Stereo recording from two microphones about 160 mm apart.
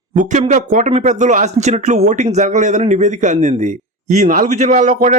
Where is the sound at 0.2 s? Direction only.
50° right (ahead or behind).